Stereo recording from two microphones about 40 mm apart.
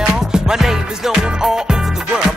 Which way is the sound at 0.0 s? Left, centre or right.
Centre.